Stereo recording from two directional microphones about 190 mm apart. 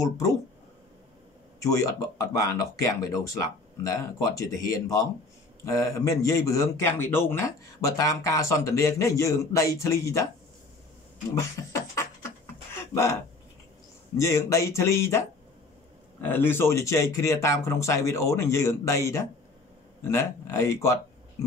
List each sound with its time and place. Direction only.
0.0 s speech: 15° left (ahead or behind)
1.6 s speech: 15° left (ahead or behind)
11.3 s beatboxing: 15° left (ahead or behind)
12.9 s speech: 15° left (ahead or behind)
16.3 s speech: 10° left (ahead or behind)